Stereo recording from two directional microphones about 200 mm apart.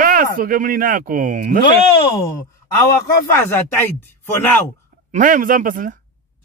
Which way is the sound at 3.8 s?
10° left (ahead or behind).